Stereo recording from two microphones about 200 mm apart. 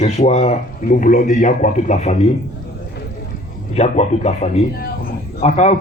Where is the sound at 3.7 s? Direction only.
30° left (ahead or behind).